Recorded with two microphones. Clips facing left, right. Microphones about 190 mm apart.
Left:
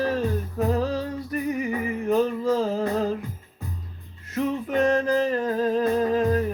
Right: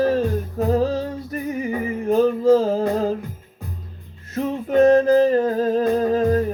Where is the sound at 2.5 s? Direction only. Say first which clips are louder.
Right 6 dB; 35° right (ahead or behind).